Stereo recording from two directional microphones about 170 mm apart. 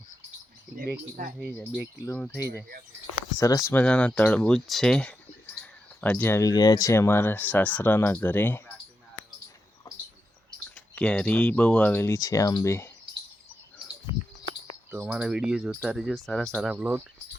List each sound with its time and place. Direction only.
2.1 s speech: 10° left (ahead or behind)
3.3 s speech: 20° left (ahead or behind)
3.8 s speech: 5° left (ahead or behind)
10.8 s speech: 5° left (ahead or behind)
14.8 s speech: 10° right (ahead or behind)
16.6 s speech: 10° right (ahead or behind)